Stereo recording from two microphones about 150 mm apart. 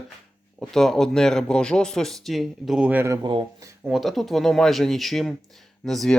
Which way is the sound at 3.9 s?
Centre (ahead or behind).